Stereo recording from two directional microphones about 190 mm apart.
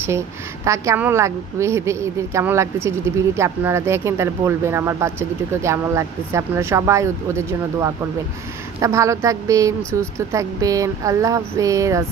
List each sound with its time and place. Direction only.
0.7 s speech: 15° right (ahead or behind)